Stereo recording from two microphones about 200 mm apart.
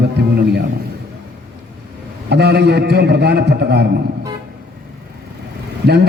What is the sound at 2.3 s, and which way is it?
A man's voice, 55° right (ahead or behind).